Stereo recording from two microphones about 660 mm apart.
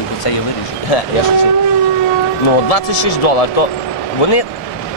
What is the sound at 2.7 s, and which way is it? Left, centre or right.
Speech, left.